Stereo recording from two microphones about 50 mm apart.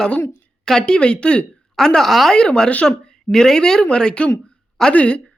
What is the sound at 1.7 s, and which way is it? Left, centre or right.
Speech, centre.